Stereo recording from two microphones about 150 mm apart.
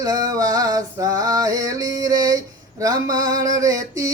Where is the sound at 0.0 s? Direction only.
25° right (ahead or behind).